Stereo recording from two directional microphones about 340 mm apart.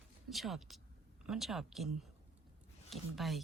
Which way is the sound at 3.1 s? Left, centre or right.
Centre.